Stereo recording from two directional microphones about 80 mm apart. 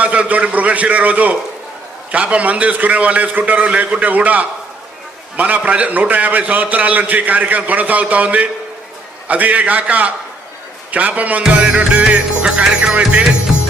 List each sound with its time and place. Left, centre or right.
0.0 s a man's voice: centre